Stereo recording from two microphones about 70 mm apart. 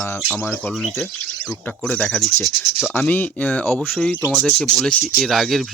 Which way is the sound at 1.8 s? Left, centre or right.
Centre.